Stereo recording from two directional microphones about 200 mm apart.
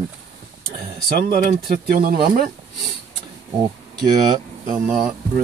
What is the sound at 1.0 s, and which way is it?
Speech, 45° right (ahead or behind).